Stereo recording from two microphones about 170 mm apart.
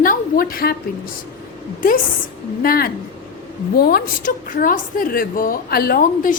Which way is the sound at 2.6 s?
60° left (ahead or behind).